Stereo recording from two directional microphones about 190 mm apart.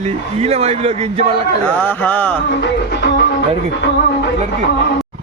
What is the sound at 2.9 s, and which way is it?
Speech, 65° left (ahead or behind).